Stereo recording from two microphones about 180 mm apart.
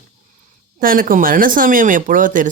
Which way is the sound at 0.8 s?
50° right (ahead or behind).